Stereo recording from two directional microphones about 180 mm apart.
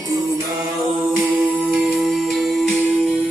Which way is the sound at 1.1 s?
10° right (ahead or behind).